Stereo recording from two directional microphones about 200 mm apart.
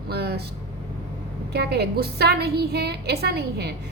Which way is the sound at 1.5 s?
55° right (ahead or behind).